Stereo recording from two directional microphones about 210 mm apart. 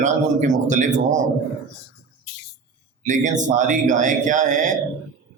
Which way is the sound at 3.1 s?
35° right (ahead or behind).